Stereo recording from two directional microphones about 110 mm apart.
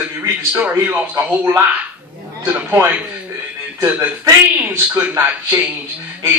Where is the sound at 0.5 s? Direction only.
15° right (ahead or behind).